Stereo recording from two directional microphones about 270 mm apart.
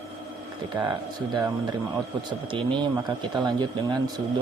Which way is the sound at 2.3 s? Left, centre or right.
Centre.